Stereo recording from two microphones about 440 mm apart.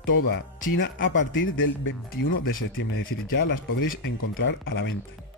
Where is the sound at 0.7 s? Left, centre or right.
Left.